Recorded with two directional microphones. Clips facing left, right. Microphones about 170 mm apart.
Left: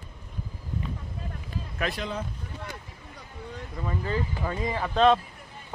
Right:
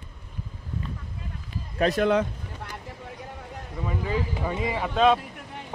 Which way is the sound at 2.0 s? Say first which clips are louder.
Right 11 dB; 75° right (ahead or behind).